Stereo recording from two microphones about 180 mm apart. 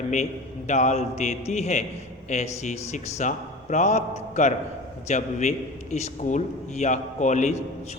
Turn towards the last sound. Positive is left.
turn(degrees=40)  # may be behind; listen again after turning